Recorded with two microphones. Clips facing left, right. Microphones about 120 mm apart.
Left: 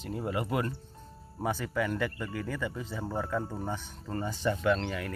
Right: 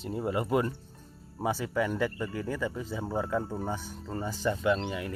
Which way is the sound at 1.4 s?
15° right (ahead or behind).